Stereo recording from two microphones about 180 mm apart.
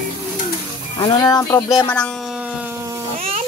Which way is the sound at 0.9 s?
25° left (ahead or behind).